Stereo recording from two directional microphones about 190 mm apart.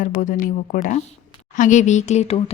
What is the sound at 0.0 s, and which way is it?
A woman's voice, 45° left (ahead or behind).